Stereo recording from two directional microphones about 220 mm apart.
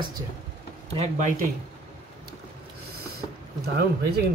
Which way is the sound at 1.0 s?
35° right (ahead or behind).